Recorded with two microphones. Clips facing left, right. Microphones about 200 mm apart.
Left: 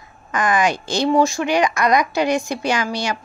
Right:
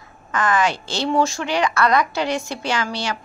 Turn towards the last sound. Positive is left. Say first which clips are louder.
# left 3 dB
turn(degrees=15)  # may be behind; listen again after turning